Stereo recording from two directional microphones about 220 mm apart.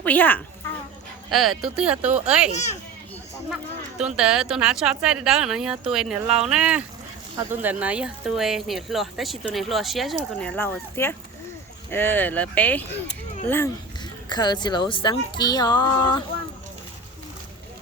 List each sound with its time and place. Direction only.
0.0 s a woman's voice: 10° left (ahead or behind)
2.5 s a child's voice: 30° left (ahead or behind)
3.9 s a woman's voice: 5° right (ahead or behind)
14.3 s a woman's voice: 20° left (ahead or behind)